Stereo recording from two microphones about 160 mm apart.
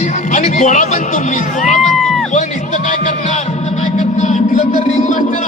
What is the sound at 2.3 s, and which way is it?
Music, 50° left (ahead or behind).